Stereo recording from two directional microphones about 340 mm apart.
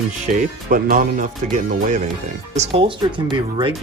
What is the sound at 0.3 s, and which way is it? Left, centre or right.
Speech, right.